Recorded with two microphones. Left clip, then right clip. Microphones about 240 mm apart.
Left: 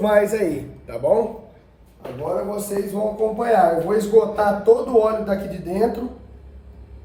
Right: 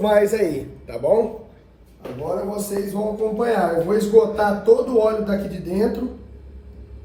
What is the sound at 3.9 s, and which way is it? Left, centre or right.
A man's voice, left.